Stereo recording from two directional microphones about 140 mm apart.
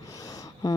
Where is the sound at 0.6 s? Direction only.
25° left (ahead or behind).